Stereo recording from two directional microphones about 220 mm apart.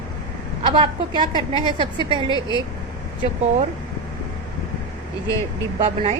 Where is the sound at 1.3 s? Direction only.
20° left (ahead or behind).